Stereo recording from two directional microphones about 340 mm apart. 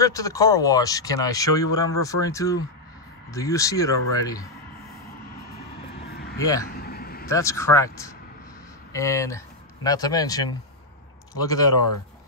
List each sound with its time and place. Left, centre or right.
0.0 s speech: centre
6.0 s a sound: left
6.3 s speech: centre
6.7 s vehicle: left
7.2 s speech: centre
8.9 s speech: centre